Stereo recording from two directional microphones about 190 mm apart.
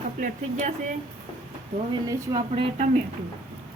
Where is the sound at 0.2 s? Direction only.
45° right (ahead or behind).